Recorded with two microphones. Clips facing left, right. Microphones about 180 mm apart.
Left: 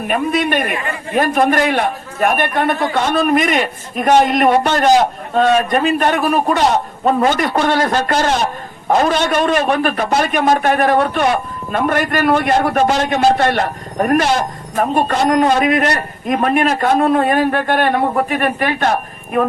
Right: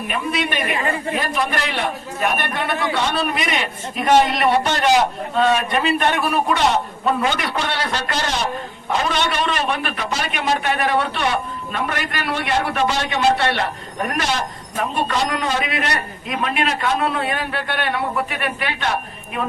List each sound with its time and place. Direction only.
0.1 s a man's voice: 50° left (ahead or behind)